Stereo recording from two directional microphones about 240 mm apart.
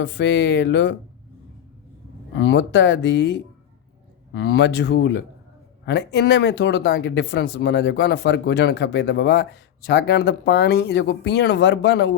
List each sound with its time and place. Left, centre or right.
0.0 s speech: left
2.4 s speech: left